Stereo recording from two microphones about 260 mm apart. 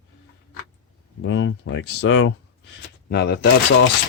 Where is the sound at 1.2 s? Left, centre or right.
Left.